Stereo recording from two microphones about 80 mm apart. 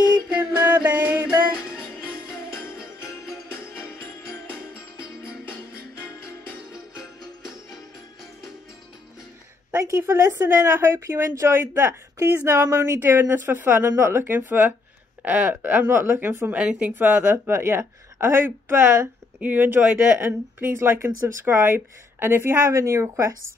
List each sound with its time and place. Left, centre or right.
0.4 s music: right
2.3 s jingle bell: left
3.8 s music: left
9.8 s speech: right
16.5 s speech: centre
16.9 s speech: right